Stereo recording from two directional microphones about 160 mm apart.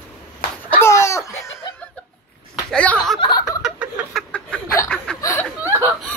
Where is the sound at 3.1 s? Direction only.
30° left (ahead or behind).